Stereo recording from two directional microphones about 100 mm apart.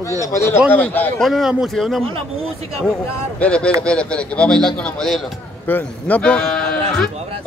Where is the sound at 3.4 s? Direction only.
10° left (ahead or behind).